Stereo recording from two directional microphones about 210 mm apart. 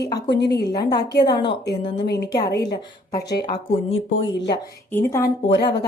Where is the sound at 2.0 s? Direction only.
50° left (ahead or behind).